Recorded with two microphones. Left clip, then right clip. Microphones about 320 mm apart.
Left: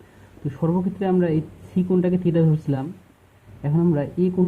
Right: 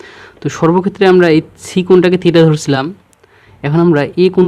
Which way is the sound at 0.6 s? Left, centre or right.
Right.